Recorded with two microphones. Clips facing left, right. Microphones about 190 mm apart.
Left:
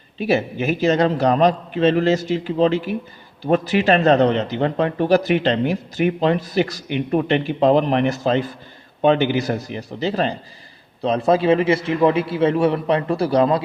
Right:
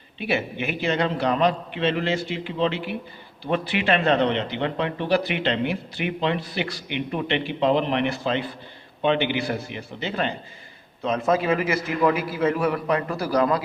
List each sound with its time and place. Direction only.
0.2 s a man's voice: 40° left (ahead or behind)